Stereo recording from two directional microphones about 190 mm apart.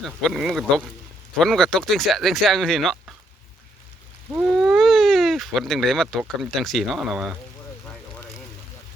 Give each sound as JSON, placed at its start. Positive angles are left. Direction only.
{"t": 0.0, "sound": "speech", "side_deg": 0}
{"t": 4.5, "sound": "speech", "side_deg": 0}